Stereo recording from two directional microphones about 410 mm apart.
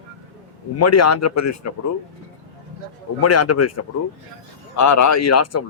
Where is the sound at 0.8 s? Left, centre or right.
Left.